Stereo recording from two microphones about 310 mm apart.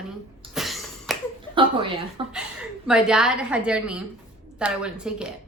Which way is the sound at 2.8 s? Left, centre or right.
Centre.